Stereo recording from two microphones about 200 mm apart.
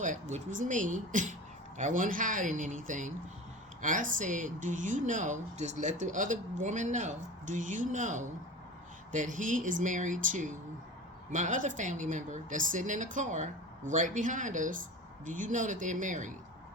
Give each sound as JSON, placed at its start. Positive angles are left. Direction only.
{"t": 0.0, "sound": "speech", "side_deg": -35}